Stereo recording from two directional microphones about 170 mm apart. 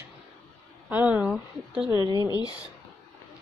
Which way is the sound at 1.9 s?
25° right (ahead or behind).